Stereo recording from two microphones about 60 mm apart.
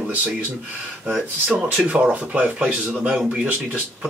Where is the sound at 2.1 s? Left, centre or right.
Right.